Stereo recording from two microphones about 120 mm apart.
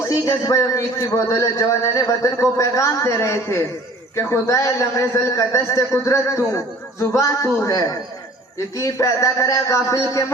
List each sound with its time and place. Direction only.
0.1 s a man's voice: 25° left (ahead or behind)